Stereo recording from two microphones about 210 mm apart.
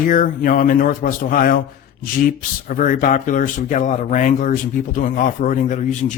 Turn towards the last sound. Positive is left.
turn(degrees=35)  # may be behind; listen again after turning